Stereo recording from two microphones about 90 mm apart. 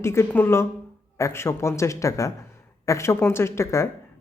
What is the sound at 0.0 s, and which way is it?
Speech, 30° left (ahead or behind).